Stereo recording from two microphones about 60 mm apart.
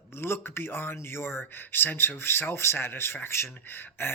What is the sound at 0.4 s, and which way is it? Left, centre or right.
Speech, left.